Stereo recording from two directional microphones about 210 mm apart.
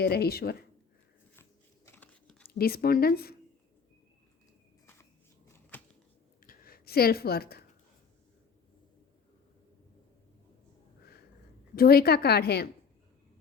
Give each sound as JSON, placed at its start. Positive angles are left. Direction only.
{"t": 0.0, "sound": "a woman's voice", "side_deg": 50}
{"t": 1.4, "sound": "biting", "side_deg": 10}
{"t": 2.5, "sound": "a woman's voice", "side_deg": 45}
{"t": 5.5, "sound": "a sound", "side_deg": 10}
{"t": 6.4, "sound": "a sound", "side_deg": 45}
{"t": 11.7, "sound": "a woman's voice", "side_deg": 45}